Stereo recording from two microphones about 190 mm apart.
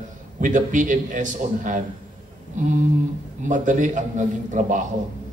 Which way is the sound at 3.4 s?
40° right (ahead or behind).